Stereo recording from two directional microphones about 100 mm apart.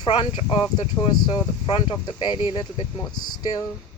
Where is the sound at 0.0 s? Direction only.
50° left (ahead or behind).